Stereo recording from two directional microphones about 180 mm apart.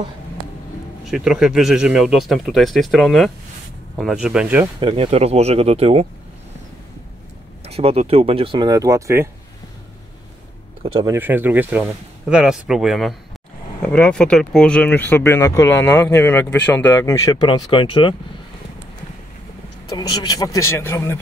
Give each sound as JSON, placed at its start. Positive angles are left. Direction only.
{"t": 1.0, "sound": "speech", "side_deg": 0}
{"t": 4.7, "sound": "speech", "side_deg": -30}
{"t": 7.6, "sound": "speech", "side_deg": -35}
{"t": 11.1, "sound": "speech", "side_deg": -10}
{"t": 19.9, "sound": "speech", "side_deg": 25}